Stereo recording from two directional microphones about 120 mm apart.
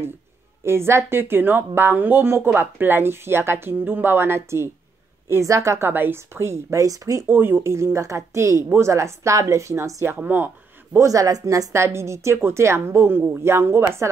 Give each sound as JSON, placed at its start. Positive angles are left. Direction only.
{"t": 0.7, "sound": "a woman's voice", "side_deg": -20}
{"t": 11.1, "sound": "a woman's voice", "side_deg": -30}